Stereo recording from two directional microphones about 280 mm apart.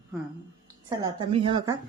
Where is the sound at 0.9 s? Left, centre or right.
Centre.